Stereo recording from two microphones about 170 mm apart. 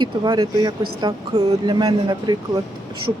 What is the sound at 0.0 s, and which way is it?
Speech, 25° right (ahead or behind).